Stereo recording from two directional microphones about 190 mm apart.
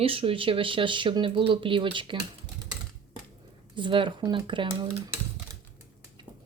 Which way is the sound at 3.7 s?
25° right (ahead or behind).